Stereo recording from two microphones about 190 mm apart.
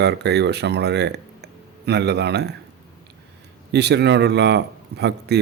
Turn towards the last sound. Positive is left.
turn(degrees=-60)  # may be behind; listen again after turning